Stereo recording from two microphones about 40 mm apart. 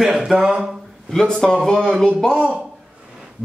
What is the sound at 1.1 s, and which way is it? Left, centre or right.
Speech, centre.